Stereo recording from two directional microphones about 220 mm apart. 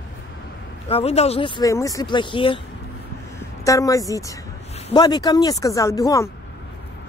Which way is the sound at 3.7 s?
15° left (ahead or behind).